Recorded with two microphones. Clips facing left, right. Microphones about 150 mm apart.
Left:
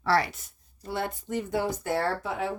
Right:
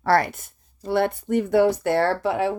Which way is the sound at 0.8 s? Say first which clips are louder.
Right 10 dB; 65° right (ahead or behind).